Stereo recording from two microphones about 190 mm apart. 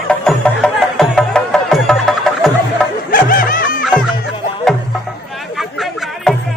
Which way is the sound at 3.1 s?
50° left (ahead or behind).